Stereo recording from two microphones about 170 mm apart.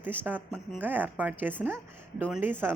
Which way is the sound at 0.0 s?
10° right (ahead or behind).